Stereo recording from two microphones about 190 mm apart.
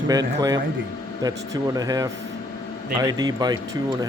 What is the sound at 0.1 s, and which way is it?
Speech, 20° right (ahead or behind).